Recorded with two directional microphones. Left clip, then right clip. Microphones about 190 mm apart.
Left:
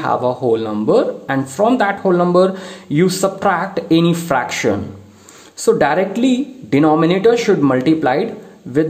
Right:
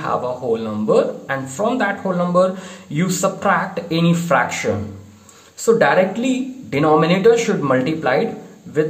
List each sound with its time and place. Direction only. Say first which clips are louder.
0.0 s speech: left 5 dB; 40° left (ahead or behind)